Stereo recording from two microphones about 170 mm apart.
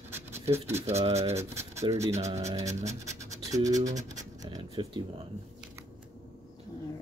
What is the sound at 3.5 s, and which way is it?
Speech, 20° right (ahead or behind).